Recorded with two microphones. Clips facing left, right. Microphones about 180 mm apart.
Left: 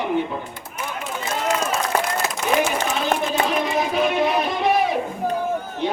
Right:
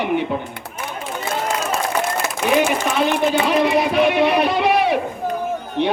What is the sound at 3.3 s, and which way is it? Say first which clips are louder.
Speech: right 5 dB; 75° right (ahead or behind).